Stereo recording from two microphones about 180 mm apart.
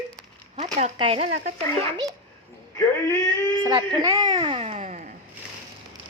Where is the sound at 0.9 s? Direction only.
30° right (ahead or behind).